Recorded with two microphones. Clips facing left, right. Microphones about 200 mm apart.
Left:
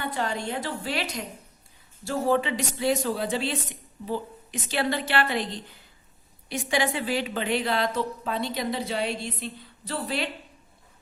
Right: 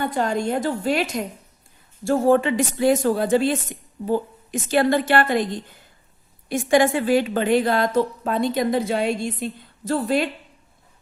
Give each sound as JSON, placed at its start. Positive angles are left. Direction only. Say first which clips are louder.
{"t": 0.0, "sound": "a woman's voice", "louder": "right 7 dB", "side_deg": -45}